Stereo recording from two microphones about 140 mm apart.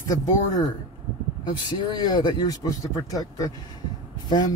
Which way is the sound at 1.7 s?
30° left (ahead or behind).